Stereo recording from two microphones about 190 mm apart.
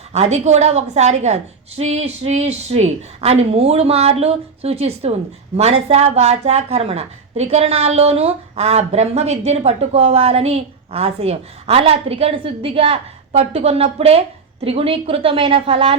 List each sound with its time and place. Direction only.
0.1 s a woman's voice: 35° right (ahead or behind)